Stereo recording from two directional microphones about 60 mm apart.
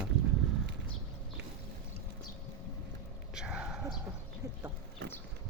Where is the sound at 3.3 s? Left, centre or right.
Centre.